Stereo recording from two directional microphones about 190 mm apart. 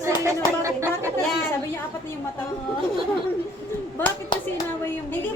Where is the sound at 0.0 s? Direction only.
15° right (ahead or behind).